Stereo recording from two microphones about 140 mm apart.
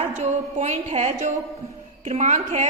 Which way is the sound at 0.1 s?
55° right (ahead or behind).